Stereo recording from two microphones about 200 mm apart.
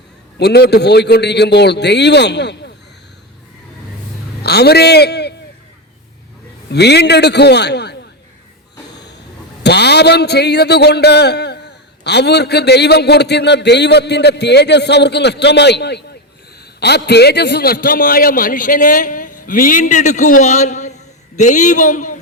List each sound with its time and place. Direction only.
0.3 s a man's voice: 55° left (ahead or behind)
4.4 s a man's voice: 55° left (ahead or behind)
6.7 s a man's voice: 55° left (ahead or behind)
9.6 s a man's voice: 55° left (ahead or behind); by 22.2 s 40° left (ahead or behind)